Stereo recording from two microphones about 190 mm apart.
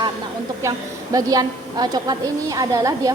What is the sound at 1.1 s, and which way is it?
A woman's voice, 20° right (ahead or behind).